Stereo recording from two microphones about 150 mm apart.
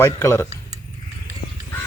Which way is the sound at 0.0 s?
15° left (ahead or behind).